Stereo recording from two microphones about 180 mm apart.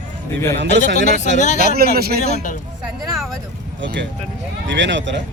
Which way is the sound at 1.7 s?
60° right (ahead or behind).